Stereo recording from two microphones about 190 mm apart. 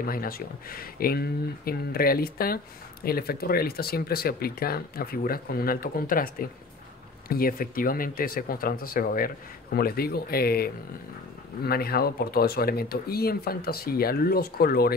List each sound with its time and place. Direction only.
0.0 s speech: 50° left (ahead or behind)